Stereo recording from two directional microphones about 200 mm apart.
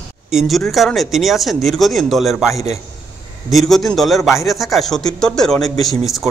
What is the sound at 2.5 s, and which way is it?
Speech, 30° right (ahead or behind).